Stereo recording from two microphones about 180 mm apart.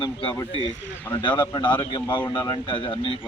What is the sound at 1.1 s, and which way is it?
Speech, 10° left (ahead or behind).